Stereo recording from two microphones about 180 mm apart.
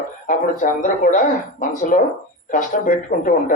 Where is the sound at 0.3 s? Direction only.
45° left (ahead or behind).